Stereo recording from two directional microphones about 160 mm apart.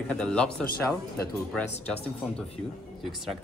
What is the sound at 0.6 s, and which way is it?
Speech, 75° left (ahead or behind).